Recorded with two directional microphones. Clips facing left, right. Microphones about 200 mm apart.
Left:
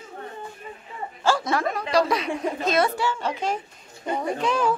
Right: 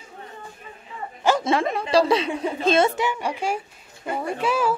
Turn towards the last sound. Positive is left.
turn(degrees=-5)  # may be behind; listen again after turning